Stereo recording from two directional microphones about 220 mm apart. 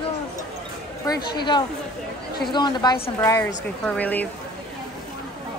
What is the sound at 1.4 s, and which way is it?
A woman's voice, 20° left (ahead or behind).